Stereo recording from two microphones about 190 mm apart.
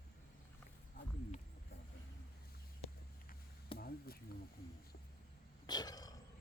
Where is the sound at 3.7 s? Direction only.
50° left (ahead or behind).